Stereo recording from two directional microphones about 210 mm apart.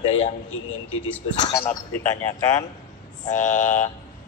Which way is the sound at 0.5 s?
70° left (ahead or behind).